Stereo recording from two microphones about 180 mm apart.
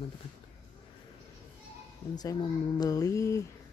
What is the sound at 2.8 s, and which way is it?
Mantra, 20° left (ahead or behind).